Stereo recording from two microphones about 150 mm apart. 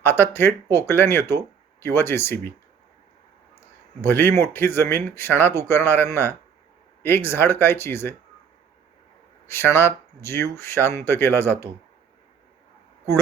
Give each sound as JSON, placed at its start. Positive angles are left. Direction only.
{"t": 0.0, "sound": "speech", "side_deg": 15}
{"t": 4.0, "sound": "speech", "side_deg": 15}
{"t": 9.5, "sound": "speech", "side_deg": 15}